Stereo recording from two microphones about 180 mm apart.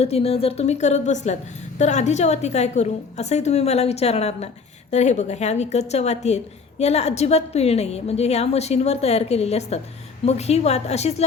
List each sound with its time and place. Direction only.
0.0 s a woman's voice: 35° left (ahead or behind)